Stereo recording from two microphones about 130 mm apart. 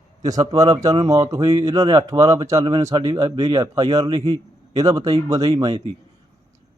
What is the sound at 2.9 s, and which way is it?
Speech, 40° right (ahead or behind).